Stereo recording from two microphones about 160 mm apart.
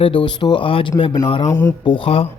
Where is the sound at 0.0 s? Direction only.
30° left (ahead or behind).